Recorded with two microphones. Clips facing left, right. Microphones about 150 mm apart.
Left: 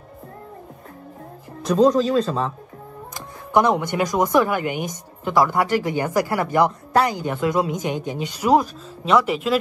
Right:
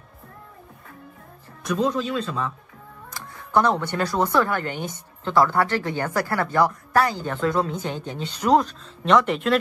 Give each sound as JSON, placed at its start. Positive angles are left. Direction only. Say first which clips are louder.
{"t": 1.6, "sound": "speech", "louder": "left 7 dB", "side_deg": 35}
{"t": 3.2, "sound": "speech", "louder": "left 2 dB", "side_deg": 15}